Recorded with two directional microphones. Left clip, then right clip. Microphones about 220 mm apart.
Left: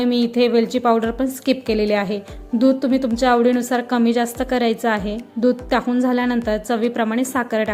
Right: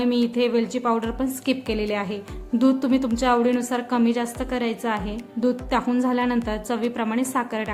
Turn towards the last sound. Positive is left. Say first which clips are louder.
# left 5 dB
turn(degrees=15)  # may be behind; listen again after turning